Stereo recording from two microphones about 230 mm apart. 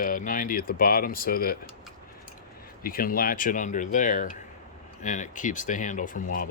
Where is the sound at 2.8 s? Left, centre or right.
Left.